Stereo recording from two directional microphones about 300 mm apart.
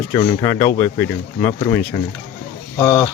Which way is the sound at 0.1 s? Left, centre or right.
Centre.